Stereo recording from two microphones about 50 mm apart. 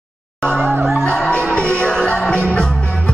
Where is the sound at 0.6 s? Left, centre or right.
Right.